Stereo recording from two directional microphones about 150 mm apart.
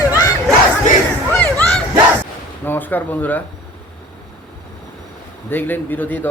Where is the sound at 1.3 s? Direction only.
10° left (ahead or behind).